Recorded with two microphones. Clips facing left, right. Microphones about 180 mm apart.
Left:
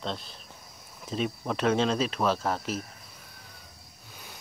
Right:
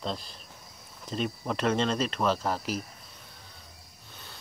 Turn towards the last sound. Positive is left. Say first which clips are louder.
# left 1 dB
turn(degrees=10)  # may be behind; listen again after turning